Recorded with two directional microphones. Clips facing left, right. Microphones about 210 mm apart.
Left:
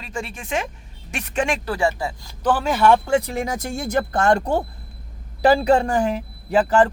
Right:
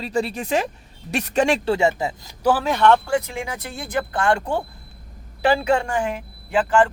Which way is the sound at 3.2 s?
40° left (ahead or behind).